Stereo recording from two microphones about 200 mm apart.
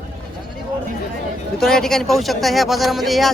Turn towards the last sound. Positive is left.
turn(degrees=0)  # may be behind; listen again after turning